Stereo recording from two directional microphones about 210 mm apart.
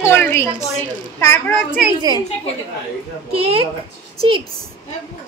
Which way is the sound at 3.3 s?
25° right (ahead or behind).